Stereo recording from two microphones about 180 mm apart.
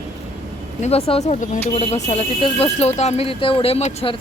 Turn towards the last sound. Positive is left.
turn(degrees=35)  # may be behind; listen again after turning